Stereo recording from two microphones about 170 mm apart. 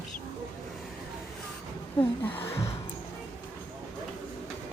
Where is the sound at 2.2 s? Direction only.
10° left (ahead or behind).